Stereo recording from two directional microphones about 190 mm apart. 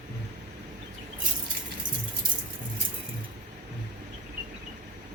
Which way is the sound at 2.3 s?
25° right (ahead or behind).